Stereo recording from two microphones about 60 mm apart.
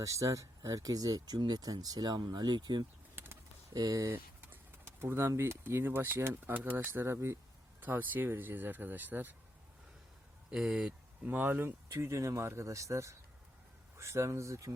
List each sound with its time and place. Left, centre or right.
0.0 s speech: right
3.8 s speech: right
4.1 s pigeon: right
5.4 s speech: right
6.5 s speech: right
6.7 s speech: right
7.8 s speech: right
10.5 s speech: centre
11.3 s speech: right
11.9 s a man's voice: right